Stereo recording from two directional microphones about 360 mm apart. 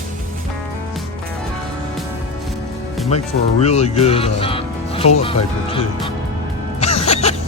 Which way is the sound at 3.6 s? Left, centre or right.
Centre.